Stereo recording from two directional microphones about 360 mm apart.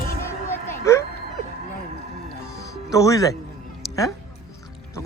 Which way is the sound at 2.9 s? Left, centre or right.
Centre.